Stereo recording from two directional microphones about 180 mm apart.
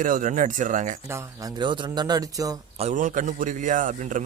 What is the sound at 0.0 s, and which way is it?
Speech, 50° right (ahead or behind).